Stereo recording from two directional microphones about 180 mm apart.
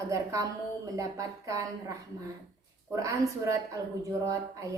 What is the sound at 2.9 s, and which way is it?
Speech, 20° right (ahead or behind).